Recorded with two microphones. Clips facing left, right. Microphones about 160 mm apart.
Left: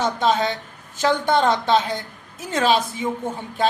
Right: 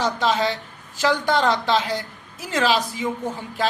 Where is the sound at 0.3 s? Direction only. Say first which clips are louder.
Even; 20° left (ahead or behind).